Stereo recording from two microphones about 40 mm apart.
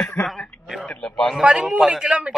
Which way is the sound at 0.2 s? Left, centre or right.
Centre.